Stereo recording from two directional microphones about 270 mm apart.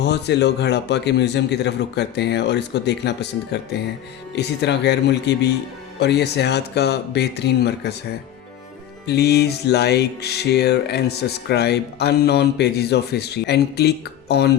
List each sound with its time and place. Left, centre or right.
0.0 s music: left
9.0 s music: left